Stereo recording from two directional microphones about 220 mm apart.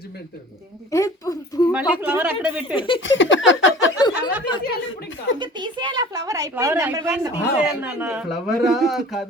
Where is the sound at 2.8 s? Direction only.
25° left (ahead or behind).